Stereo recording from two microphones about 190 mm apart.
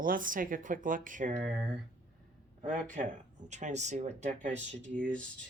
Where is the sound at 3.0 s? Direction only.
40° right (ahead or behind).